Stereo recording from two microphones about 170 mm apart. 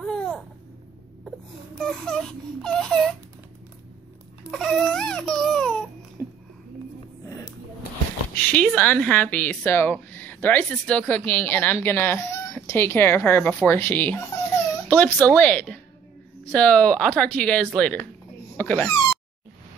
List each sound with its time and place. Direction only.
0.0 s a sound: 5° left (ahead or behind)
1.8 s baby cry: centre (ahead or behind)
4.5 s baby cry: centre (ahead or behind)
6.2 s a sound: 15° left (ahead or behind)
8.4 s speech: 10° left (ahead or behind)
16.5 s baby cry: 5° left (ahead or behind)
17.7 s speech: 5° left (ahead or behind)